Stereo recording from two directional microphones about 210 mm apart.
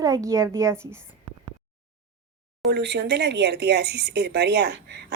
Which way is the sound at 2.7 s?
55° right (ahead or behind).